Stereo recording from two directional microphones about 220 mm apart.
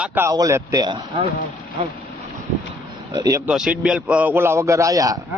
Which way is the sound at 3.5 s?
5° right (ahead or behind).